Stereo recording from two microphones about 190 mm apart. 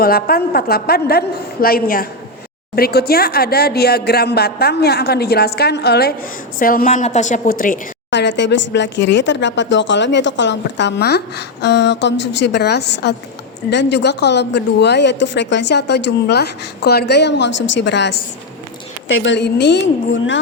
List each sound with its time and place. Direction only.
0.0 s a woman's voice: 50° left (ahead or behind)
8.1 s speech: 65° left (ahead or behind)
19.0 s speech: 80° left